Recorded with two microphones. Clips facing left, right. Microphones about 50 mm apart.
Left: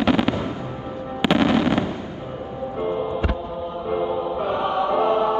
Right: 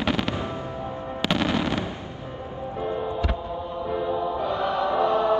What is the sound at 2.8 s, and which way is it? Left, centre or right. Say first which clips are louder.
Music: left 3 dB; left.